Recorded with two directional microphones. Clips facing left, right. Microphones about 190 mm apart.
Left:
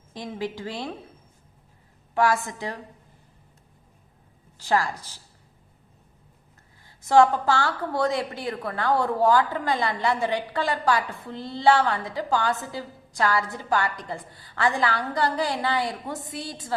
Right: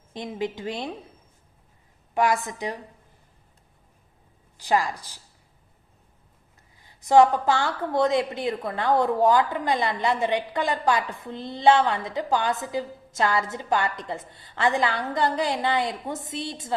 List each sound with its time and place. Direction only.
0.1 s a woman's voice: 20° right (ahead or behind)
2.1 s a woman's voice: 20° right (ahead or behind)
4.5 s a woman's voice: 15° right (ahead or behind)
6.8 s a woman's voice: 15° right (ahead or behind)